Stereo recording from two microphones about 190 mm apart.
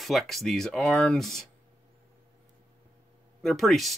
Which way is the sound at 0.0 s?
Centre (ahead or behind).